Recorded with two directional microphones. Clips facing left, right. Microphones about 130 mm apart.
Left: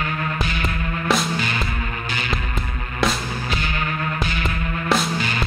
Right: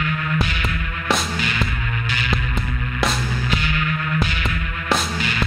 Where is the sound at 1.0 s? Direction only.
Centre (ahead or behind).